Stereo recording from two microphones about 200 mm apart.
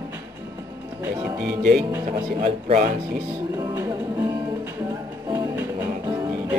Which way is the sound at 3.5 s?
15° right (ahead or behind).